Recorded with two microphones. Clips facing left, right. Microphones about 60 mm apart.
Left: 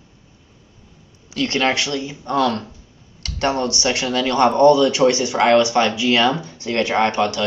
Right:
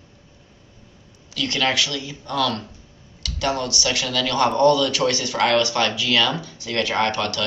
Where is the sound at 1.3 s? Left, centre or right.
Left.